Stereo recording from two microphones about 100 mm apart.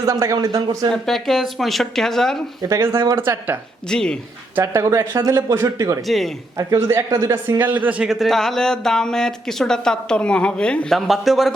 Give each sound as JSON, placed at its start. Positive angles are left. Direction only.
{"t": 0.0, "sound": "speech", "side_deg": -35}
{"t": 1.0, "sound": "speech", "side_deg": 5}
{"t": 2.6, "sound": "speech", "side_deg": -40}
{"t": 3.2, "sound": "speech", "side_deg": -20}
{"t": 3.8, "sound": "speech", "side_deg": 5}
{"t": 4.6, "sound": "speech", "side_deg": -30}
{"t": 6.1, "sound": "speech", "side_deg": 0}
{"t": 6.6, "sound": "speech", "side_deg": -30}